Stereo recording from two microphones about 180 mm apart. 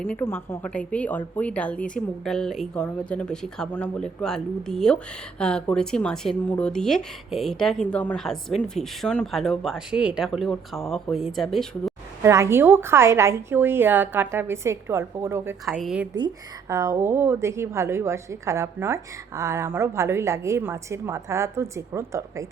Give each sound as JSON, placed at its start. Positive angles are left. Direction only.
{"t": 0.1, "sound": "a woman's voice", "side_deg": 10}
{"t": 12.2, "sound": "a woman's voice", "side_deg": -15}
{"t": 15.6, "sound": "speech", "side_deg": 0}
{"t": 16.1, "sound": "a woman's voice", "side_deg": -20}